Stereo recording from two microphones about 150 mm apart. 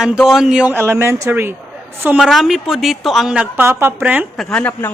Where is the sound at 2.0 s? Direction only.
5° right (ahead or behind).